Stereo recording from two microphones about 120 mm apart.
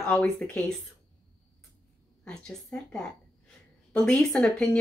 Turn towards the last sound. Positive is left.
turn(degrees=5)  # may be behind; listen again after turning